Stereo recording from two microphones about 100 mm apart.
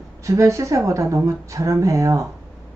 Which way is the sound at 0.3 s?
30° right (ahead or behind).